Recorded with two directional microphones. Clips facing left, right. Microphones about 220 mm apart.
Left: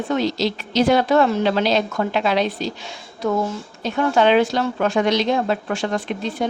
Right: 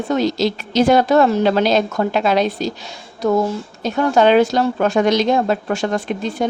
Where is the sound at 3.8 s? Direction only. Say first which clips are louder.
Right 3 dB; 40° right (ahead or behind).